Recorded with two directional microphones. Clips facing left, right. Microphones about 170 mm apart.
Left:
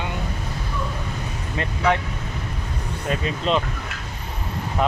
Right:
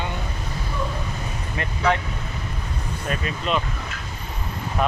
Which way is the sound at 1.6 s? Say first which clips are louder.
Left 1 dB; 20° left (ahead or behind).